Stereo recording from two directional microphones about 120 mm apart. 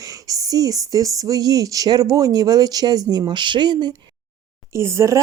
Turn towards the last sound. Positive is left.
turn(degrees=-25)  # may be behind; listen again after turning